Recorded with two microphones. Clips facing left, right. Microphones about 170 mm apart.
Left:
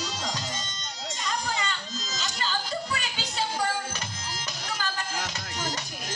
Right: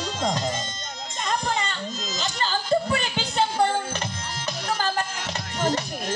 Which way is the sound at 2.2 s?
35° right (ahead or behind).